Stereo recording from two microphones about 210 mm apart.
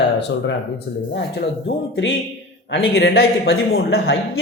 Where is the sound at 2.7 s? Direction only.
50° left (ahead or behind).